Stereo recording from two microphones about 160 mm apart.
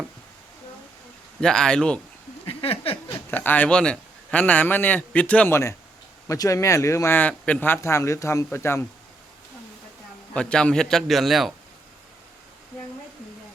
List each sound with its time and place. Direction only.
1.4 s a man's voice: 5° left (ahead or behind)
2.5 s a sound: 35° left (ahead or behind)
3.1 s a man's voice: 15° left (ahead or behind)
10.3 s a man's voice: 5° left (ahead or behind)